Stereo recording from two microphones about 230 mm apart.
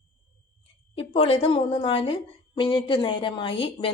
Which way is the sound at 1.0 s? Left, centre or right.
Left.